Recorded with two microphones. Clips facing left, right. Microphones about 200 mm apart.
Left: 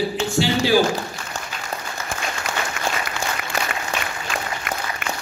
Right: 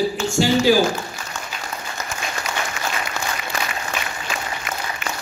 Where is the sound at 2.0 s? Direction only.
40° right (ahead or behind).